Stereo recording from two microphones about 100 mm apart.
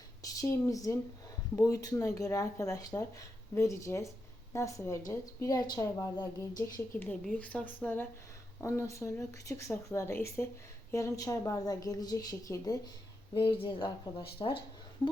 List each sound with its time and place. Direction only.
0.2 s speech: 30° left (ahead or behind)
7.3 s speech: 15° left (ahead or behind)
8.6 s speech: 30° left (ahead or behind)
13.3 s speech: 55° left (ahead or behind)